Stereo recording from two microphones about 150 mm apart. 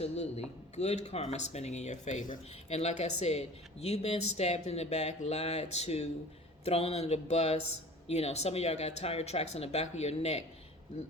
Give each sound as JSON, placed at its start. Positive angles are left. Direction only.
{"t": 0.0, "sound": "speech", "side_deg": 45}